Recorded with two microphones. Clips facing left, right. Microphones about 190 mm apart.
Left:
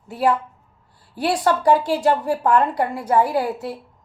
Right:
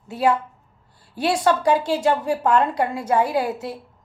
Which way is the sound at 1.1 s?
20° right (ahead or behind).